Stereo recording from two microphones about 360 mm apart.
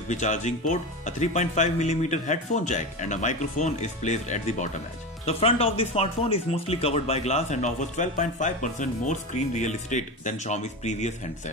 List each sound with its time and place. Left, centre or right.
0.1 s speech: centre